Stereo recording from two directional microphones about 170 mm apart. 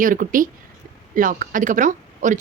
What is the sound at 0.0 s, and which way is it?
Speech, 50° right (ahead or behind).